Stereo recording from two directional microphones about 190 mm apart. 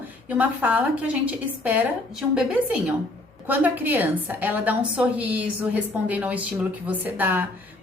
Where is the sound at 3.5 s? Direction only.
10° right (ahead or behind).